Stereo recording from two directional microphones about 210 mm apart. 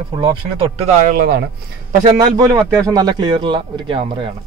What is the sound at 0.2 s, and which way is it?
Speech, 25° right (ahead or behind).